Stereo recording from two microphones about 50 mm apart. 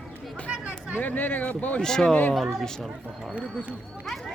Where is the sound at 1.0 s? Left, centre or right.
Left.